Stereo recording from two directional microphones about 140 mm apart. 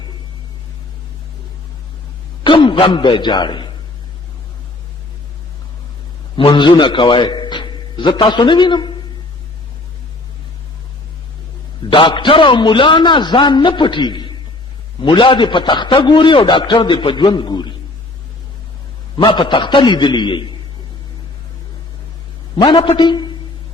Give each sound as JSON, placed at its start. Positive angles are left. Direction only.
{"t": 2.4, "sound": "a man's voice", "side_deg": 35}
{"t": 6.3, "sound": "a man's voice", "side_deg": 35}
{"t": 11.9, "sound": "a man's voice", "side_deg": 35}
{"t": 19.1, "sound": "a man's voice", "side_deg": 35}
{"t": 22.5, "sound": "a man's voice", "side_deg": 35}